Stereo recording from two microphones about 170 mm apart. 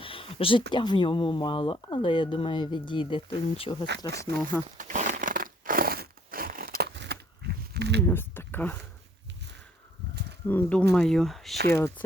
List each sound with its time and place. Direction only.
0.0 s a sound: 30° left (ahead or behind)
0.7 s speech: 30° left (ahead or behind)
4.8 s crumpling: 45° right (ahead or behind); by 7.2 s 80° right
7.7 s a sound: 80° right
8.0 s speech: 15° left (ahead or behind)
10.4 s speech: 10° left (ahead or behind)